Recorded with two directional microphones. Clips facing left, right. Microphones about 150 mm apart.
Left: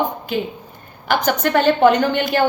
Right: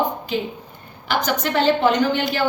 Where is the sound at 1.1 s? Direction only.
55° left (ahead or behind).